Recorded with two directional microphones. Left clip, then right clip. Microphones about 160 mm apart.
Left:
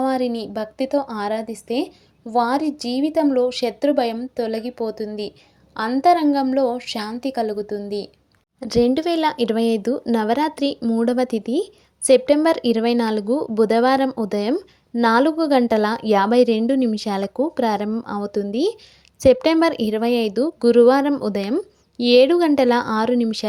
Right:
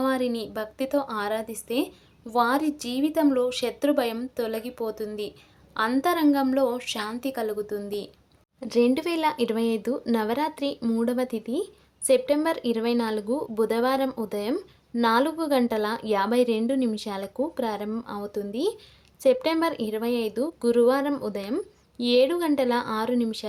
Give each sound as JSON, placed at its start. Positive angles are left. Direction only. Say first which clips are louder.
{"t": 0.0, "sound": "a woman's voice", "louder": "left 4 dB", "side_deg": 20}
{"t": 10.8, "sound": "speech", "louder": "left 6 dB", "side_deg": 15}
{"t": 11.0, "sound": "a woman's voice", "louder": "left 8 dB", "side_deg": 35}